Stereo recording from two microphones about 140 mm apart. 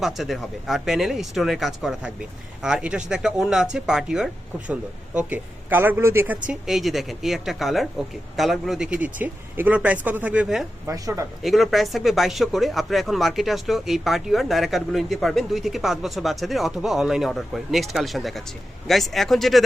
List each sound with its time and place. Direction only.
0.0 s speech: centre (ahead or behind)
6.5 s speech: centre (ahead or behind)
10.8 s speech: 20° right (ahead or behind)
11.4 s speech: centre (ahead or behind)